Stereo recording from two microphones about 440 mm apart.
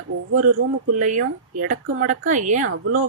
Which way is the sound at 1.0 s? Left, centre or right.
Centre.